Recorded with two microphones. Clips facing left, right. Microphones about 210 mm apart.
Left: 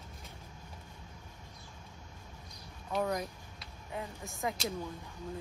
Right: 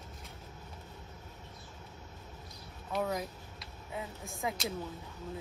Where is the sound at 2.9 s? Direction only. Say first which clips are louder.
Left 1 dB; centre (ahead or behind).